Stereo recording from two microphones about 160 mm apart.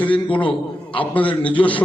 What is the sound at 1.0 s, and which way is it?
Speech, 10° left (ahead or behind).